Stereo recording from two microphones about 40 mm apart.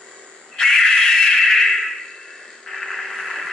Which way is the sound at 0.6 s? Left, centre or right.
Centre.